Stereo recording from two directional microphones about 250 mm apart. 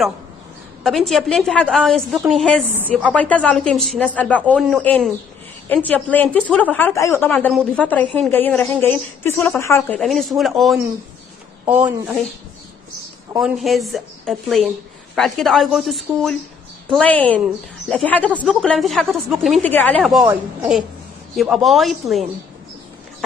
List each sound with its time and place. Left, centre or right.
0.8 s a woman's voice: centre
13.4 s a woman's voice: centre